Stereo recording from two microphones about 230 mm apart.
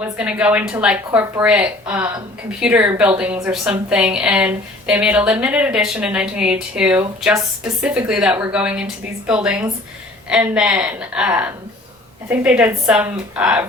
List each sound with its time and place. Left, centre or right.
0.0 s a woman's voice: centre